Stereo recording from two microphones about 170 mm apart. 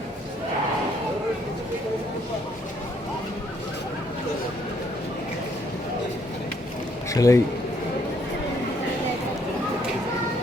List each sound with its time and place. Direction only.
7.1 s a man's voice: 20° left (ahead or behind)